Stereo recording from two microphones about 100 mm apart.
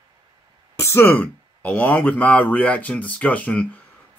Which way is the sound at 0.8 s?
25° left (ahead or behind).